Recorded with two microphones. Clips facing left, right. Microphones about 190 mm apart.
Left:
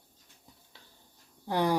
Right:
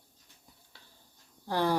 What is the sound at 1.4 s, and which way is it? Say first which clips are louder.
Speech: left 1 dB; 15° left (ahead or behind).